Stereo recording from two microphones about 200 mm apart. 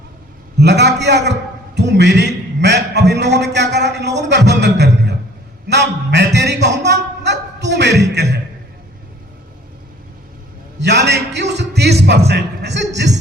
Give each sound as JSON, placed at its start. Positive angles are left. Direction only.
{"t": 0.6, "sound": "a man's voice", "side_deg": -60}
{"t": 4.3, "sound": "music", "side_deg": -60}
{"t": 5.6, "sound": "a man's voice", "side_deg": -60}
{"t": 10.8, "sound": "a man's voice", "side_deg": -60}